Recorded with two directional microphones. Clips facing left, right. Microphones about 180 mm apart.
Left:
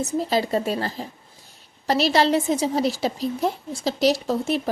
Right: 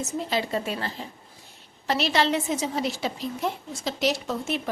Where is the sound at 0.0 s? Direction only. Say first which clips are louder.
Left 5 dB; 40° left (ahead or behind).